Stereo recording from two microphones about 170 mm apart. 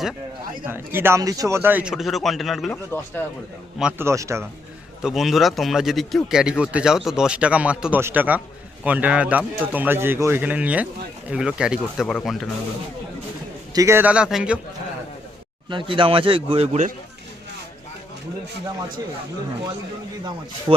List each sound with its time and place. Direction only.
0.9 s speech: 15° right (ahead or behind)
3.8 s a man's voice: 10° right (ahead or behind)
5.0 s a man's voice: centre (ahead or behind)
13.7 s a man's voice: 15° right (ahead or behind)
15.7 s a man's voice: 30° right (ahead or behind)
20.7 s speech: 10° right (ahead or behind)